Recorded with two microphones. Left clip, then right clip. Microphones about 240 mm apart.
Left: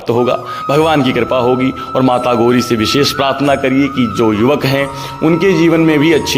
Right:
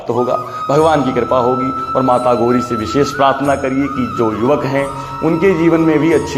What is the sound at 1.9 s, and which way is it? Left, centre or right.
Speech, left.